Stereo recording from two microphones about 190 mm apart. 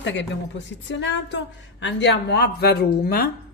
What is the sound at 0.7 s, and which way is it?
A woman's voice, 70° left (ahead or behind).